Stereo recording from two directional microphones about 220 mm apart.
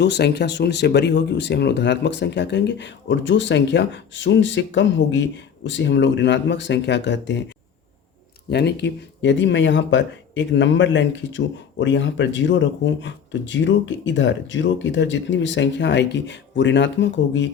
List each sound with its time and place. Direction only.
0.0 s speech: 50° left (ahead or behind)
8.4 s speech: 50° left (ahead or behind)